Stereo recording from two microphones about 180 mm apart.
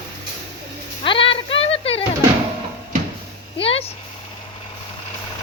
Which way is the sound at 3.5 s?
30° left (ahead or behind).